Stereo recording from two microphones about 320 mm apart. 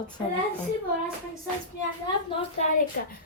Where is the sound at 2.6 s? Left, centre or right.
Left.